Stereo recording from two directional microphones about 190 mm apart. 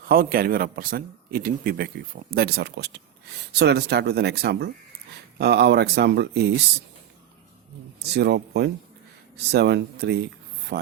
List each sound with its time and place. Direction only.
0.0 s a man's voice: 50° right (ahead or behind)
7.9 s speech: 60° right (ahead or behind)